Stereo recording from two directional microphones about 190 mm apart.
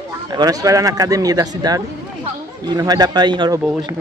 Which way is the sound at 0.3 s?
20° right (ahead or behind).